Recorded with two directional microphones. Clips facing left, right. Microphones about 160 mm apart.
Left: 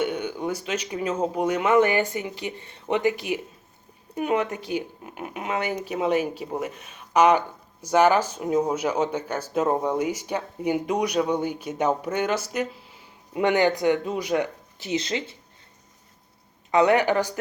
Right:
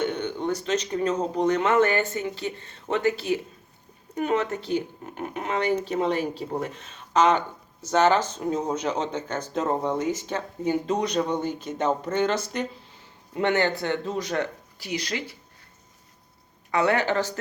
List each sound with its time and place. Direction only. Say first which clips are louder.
0.0 s speech: even; 10° left (ahead or behind)
14.8 s speech: left 3 dB; 25° left (ahead or behind)
16.7 s speech: left 4 dB; 15° left (ahead or behind)